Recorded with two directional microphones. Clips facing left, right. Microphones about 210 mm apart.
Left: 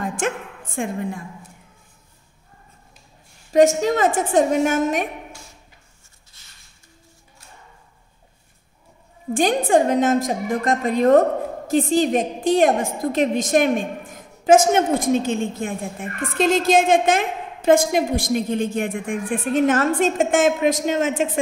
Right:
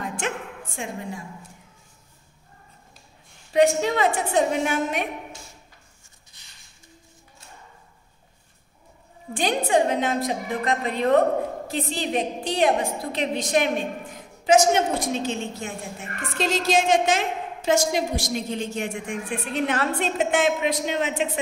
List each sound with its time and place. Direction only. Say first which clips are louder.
0.2 s a woman's voice: left 5 dB; 50° left (ahead or behind)
3.5 s a woman's voice: left 4 dB; 45° left (ahead or behind)
6.4 s a sound: left 1 dB; 15° right (ahead or behind)
9.3 s a woman's voice: left 5 dB; 50° left (ahead or behind)